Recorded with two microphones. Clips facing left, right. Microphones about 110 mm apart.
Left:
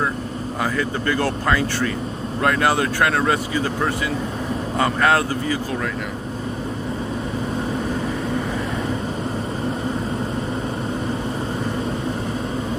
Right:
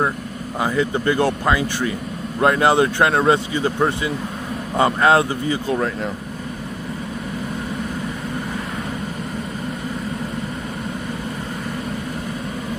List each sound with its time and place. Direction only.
0.6 s speech: 20° right (ahead or behind)